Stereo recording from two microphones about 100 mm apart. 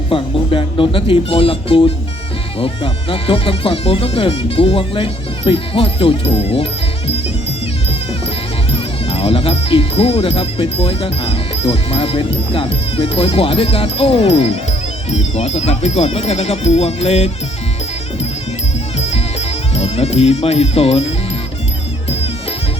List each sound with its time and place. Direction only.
0.1 s speech: 60° left (ahead or behind); by 6.7 s 75° left (ahead or behind)
8.7 s speech: 75° left (ahead or behind); by 17.3 s 90° left
18.9 s music: 90° left